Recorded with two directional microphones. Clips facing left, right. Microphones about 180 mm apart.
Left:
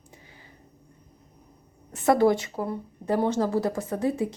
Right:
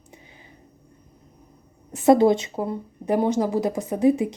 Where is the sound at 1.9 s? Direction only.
20° right (ahead or behind).